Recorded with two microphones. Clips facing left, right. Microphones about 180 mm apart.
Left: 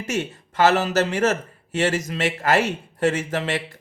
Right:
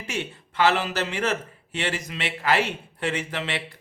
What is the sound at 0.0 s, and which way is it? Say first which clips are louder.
A man's voice: left 5 dB; 40° left (ahead or behind).